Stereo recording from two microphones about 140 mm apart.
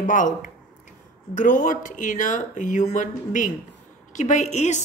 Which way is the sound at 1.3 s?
65° left (ahead or behind).